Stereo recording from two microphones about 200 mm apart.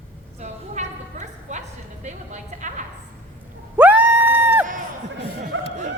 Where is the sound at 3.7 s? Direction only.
10° right (ahead or behind).